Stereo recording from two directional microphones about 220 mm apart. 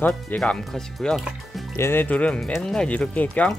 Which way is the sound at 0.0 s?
5° left (ahead or behind).